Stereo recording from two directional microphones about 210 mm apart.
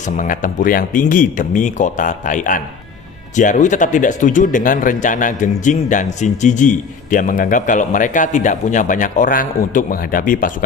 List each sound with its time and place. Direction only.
0.0 s a man's voice: 40° left (ahead or behind)